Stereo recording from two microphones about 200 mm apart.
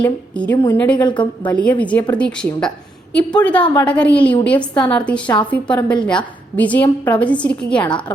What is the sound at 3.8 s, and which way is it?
A woman's voice, 5° left (ahead or behind).